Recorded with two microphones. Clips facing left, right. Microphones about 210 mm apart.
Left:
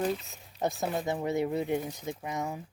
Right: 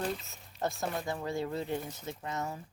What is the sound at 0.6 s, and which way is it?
Speech, 20° left (ahead or behind).